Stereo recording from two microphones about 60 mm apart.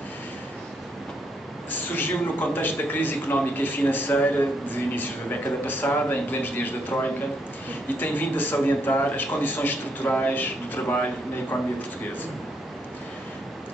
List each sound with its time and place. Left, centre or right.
1.7 s a man's voice: left